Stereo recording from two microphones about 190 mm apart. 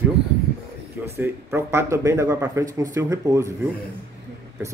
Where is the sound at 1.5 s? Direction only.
15° right (ahead or behind).